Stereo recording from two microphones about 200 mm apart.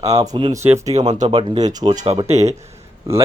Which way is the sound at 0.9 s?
35° right (ahead or behind).